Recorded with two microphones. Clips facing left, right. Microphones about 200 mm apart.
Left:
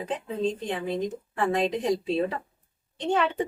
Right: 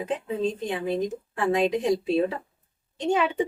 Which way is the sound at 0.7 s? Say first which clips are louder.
Right 2 dB; 5° right (ahead or behind).